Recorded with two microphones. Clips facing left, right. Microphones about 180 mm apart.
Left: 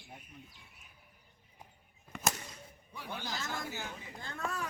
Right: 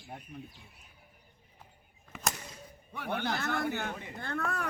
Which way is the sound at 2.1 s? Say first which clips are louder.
Left 1 dB; 5° right (ahead or behind).